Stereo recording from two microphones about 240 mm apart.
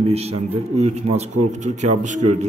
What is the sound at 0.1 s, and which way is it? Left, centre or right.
A man's voice, right.